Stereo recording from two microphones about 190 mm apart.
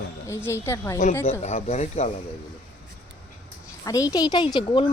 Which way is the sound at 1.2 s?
30° left (ahead or behind).